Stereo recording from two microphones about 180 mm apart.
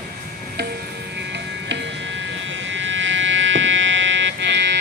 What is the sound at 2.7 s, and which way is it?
Vehicle, 90° right.